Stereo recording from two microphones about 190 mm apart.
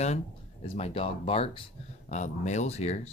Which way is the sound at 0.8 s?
30° left (ahead or behind).